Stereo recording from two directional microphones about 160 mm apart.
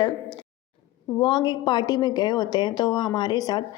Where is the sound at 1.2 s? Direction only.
30° left (ahead or behind).